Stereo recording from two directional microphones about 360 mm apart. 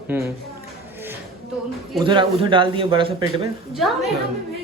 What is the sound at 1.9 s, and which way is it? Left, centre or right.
A man's voice, centre.